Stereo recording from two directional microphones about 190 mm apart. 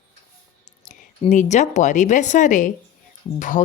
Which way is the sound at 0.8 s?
40° left (ahead or behind).